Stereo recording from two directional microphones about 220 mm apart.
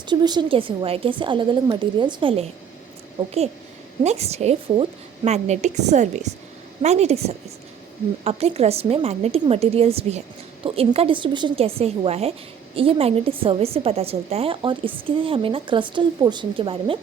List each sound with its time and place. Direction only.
0.1 s a woman's voice: 20° right (ahead or behind)
4.0 s a woman's voice: 30° right (ahead or behind)